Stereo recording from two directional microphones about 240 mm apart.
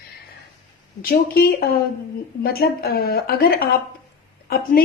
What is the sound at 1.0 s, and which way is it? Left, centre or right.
A woman's voice, left.